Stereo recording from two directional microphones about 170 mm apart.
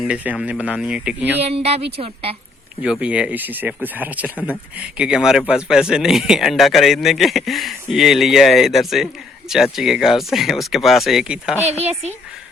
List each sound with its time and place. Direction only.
0.0 s speech: 5° right (ahead or behind)
1.4 s a woman's voice: 35° right (ahead or behind)
2.8 s speech: 5° right (ahead or behind)
11.8 s a woman's voice: 40° right (ahead or behind)